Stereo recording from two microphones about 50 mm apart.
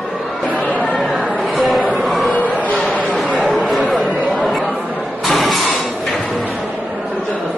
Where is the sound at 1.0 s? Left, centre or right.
Centre.